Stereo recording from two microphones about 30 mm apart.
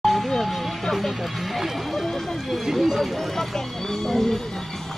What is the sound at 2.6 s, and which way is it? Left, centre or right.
Speech, centre.